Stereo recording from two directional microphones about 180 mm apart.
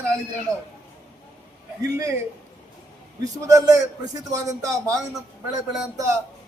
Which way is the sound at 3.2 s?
20° right (ahead or behind).